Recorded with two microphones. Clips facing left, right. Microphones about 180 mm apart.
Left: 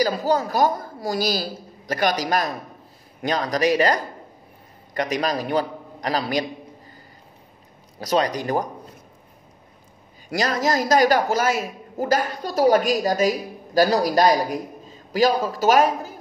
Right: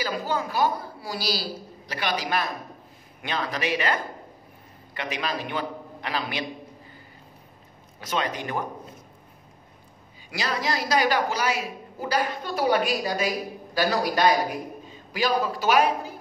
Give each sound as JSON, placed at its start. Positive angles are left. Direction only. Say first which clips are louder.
{"t": 0.0, "sound": "a woman's voice", "louder": "left 7 dB", "side_deg": 40}
{"t": 8.0, "sound": "a man's voice", "louder": "left 7 dB", "side_deg": 40}
{"t": 10.3, "sound": "a woman's voice", "louder": "left 6 dB", "side_deg": 45}